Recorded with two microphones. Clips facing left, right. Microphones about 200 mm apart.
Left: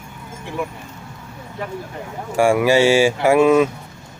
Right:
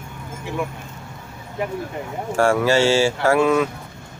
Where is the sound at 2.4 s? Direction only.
15° left (ahead or behind).